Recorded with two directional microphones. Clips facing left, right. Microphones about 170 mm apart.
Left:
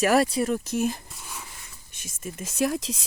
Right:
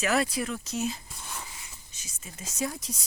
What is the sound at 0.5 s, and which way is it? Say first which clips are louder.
Speech: left 6 dB; 55° left (ahead or behind).